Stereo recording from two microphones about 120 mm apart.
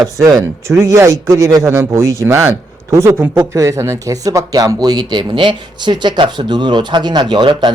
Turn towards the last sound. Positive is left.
turn(degrees=-40)  # may be behind; listen again after turning